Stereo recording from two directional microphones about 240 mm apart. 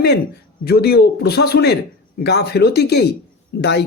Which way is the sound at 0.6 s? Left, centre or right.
Left.